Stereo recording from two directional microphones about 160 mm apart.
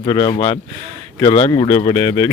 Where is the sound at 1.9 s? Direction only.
15° left (ahead or behind).